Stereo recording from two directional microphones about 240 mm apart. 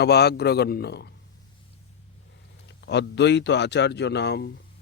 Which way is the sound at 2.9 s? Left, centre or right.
Left.